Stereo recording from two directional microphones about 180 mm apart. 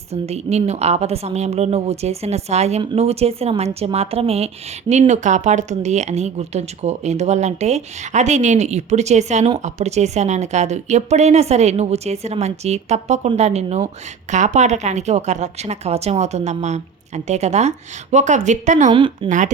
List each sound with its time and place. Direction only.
0.1 s a woman's voice: 35° right (ahead or behind)
18.9 s a woman's voice: 30° right (ahead or behind)
19.3 s speech: 45° right (ahead or behind)